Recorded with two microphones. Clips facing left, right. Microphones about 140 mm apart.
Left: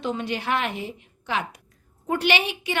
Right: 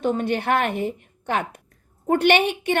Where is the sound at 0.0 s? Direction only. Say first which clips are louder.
Right 5 dB; 50° right (ahead or behind).